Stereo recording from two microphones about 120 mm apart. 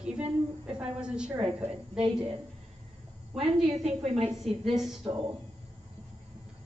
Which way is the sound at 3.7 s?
60° right (ahead or behind).